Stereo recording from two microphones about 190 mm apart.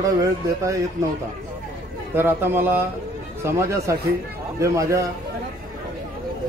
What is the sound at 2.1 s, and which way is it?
A man's voice, 10° right (ahead or behind).